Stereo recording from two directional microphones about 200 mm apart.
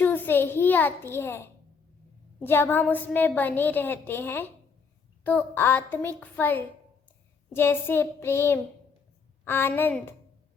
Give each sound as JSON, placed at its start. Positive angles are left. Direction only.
{"t": 0.0, "sound": "a child's voice", "side_deg": 10}